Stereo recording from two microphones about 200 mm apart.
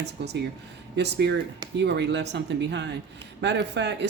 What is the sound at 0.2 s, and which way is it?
A woman's voice, 60° right (ahead or behind).